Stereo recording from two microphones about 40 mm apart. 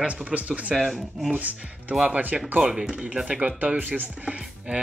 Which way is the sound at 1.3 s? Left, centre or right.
Right.